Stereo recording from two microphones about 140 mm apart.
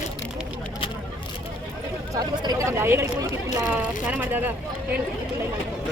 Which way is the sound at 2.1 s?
25° right (ahead or behind).